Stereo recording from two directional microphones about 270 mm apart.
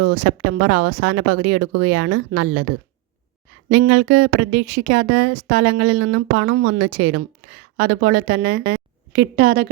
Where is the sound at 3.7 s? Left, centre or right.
Right.